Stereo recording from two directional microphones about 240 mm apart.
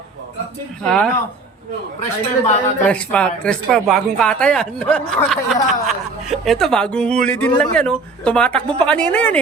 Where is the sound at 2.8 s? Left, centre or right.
Centre.